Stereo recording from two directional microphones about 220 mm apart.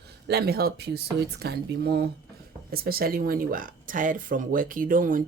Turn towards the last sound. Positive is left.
turn(degrees=-40)  # may be behind; listen again after turning